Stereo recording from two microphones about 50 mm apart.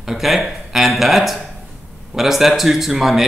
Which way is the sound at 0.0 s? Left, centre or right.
Centre.